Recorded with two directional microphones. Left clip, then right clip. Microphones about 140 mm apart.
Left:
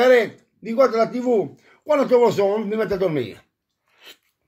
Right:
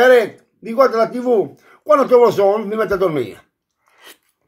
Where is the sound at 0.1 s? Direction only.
15° left (ahead or behind).